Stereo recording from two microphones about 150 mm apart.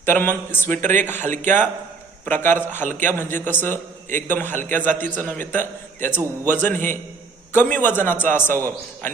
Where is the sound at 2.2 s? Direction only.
15° left (ahead or behind).